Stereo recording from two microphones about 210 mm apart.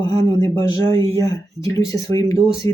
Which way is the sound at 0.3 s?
20° left (ahead or behind).